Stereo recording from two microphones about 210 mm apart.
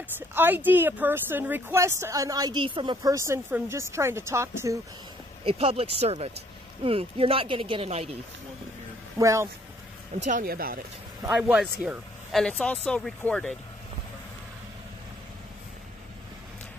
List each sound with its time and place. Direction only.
0.3 s speech: 10° right (ahead or behind)
5.4 s speech: 25° right (ahead or behind)
9.2 s speech: 15° right (ahead or behind)
10.1 s speech: 35° right (ahead or behind)
11.3 s speech: centre (ahead or behind)